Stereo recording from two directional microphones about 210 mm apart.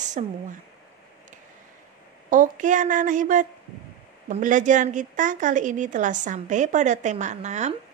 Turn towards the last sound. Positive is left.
turn(degrees=-35)  # may be behind; listen again after turning